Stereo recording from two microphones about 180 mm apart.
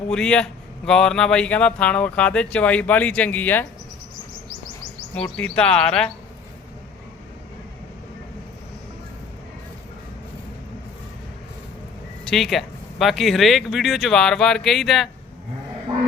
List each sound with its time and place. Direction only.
0.1 s speech: 5° left (ahead or behind)
5.1 s speech: 5° left (ahead or behind)
12.2 s speech: centre (ahead or behind)